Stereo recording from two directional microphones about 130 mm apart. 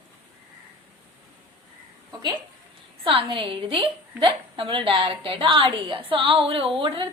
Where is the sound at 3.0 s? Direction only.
45° right (ahead or behind).